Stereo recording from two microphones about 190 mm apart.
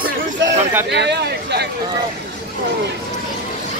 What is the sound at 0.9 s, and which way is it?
Speech, 60° right (ahead or behind).